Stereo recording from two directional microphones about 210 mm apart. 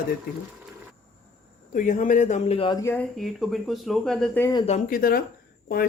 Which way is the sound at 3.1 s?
Centre (ahead or behind).